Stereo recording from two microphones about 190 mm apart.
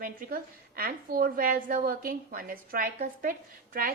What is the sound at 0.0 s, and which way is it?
A woman's voice, 50° right (ahead or behind).